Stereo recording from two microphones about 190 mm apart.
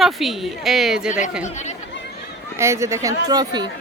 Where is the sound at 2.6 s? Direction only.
15° right (ahead or behind).